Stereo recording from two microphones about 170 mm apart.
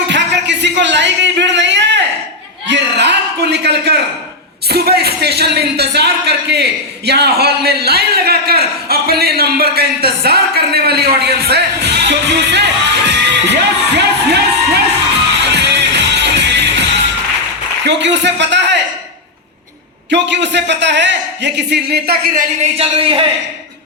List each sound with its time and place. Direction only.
0.1 s a sound: 90° right
4.7 s speech: 70° right (ahead or behind)
15.5 s music: 90° right
17.8 s a man's voice: 90° right
20.1 s a man's voice: 90° right; by 22.4 s 65° right (ahead or behind)
22.8 s speech: 35° right (ahead or behind)